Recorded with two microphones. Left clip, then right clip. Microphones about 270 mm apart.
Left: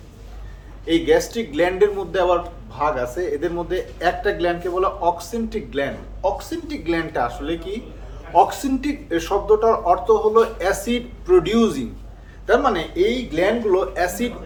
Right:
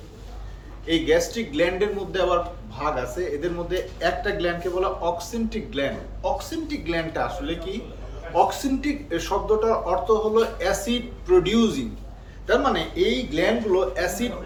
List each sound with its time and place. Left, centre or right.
0.9 s a man's voice: left